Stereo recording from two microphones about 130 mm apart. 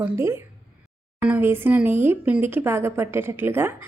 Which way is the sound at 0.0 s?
20° right (ahead or behind).